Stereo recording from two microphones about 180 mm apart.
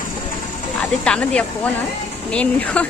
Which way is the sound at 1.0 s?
5° left (ahead or behind).